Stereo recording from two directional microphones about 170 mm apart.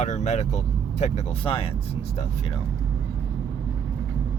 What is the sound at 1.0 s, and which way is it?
Speech, 35° left (ahead or behind).